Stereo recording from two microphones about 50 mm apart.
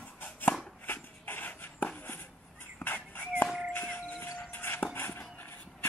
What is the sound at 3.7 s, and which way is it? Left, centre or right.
Music, left.